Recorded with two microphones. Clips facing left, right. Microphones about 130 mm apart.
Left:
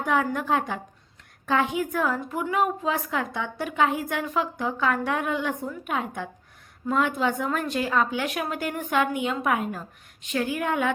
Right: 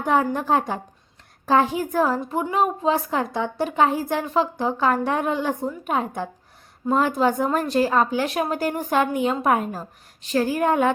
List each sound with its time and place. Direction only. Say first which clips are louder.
0.0 s a woman's voice: right 4 dB; 35° right (ahead or behind)